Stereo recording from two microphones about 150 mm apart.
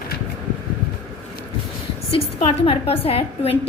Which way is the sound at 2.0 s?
40° left (ahead or behind).